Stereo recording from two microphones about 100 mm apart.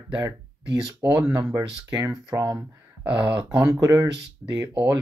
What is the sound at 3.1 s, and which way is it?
Speech, 15° right (ahead or behind).